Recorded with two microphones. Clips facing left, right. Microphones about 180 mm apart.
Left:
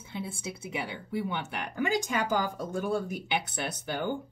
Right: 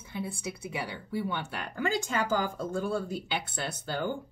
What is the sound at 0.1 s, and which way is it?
Speech, 25° left (ahead or behind).